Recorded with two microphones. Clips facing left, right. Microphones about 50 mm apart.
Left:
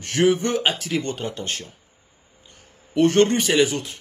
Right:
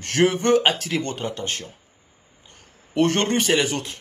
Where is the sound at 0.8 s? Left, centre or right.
Right.